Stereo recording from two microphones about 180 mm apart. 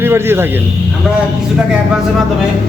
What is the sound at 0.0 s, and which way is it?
Speech, 15° right (ahead or behind).